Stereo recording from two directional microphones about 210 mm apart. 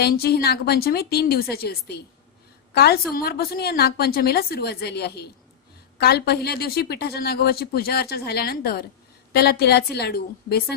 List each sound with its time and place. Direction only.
0.0 s speech: 50° left (ahead or behind)